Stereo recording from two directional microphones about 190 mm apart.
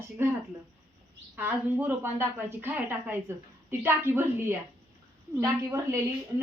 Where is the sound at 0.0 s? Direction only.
15° right (ahead or behind).